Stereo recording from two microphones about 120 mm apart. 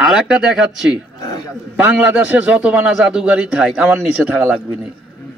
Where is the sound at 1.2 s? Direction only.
35° left (ahead or behind).